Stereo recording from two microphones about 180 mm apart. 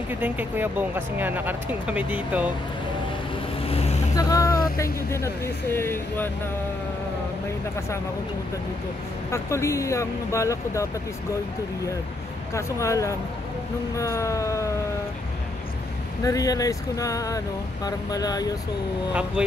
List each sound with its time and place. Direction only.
0.1 s speech: 10° right (ahead or behind)
3.6 s vehicle: 35° left (ahead or behind)
4.1 s vehicle: 20° left (ahead or behind)
4.7 s speech: 15° left (ahead or behind)
9.3 s speech: 15° left (ahead or behind)
12.5 s speech: 15° left (ahead or behind)
16.3 s speech: 20° left (ahead or behind)